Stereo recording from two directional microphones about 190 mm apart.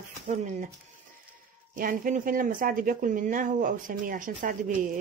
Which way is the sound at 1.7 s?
45° right (ahead or behind).